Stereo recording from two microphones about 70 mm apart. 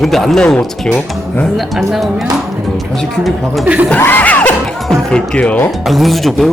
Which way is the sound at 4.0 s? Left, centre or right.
Left.